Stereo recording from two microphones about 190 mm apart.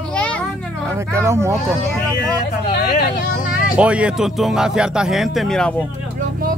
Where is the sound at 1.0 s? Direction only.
15° right (ahead or behind).